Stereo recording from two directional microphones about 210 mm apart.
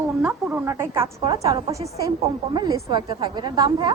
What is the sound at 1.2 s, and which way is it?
A woman's voice, 25° right (ahead or behind).